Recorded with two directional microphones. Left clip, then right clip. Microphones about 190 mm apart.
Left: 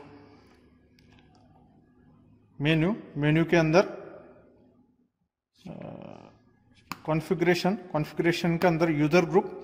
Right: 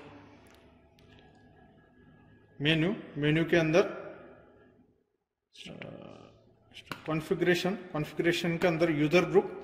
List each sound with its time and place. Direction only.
2.6 s a man's voice: 50° left (ahead or behind)
7.1 s a man's voice: 55° left (ahead or behind)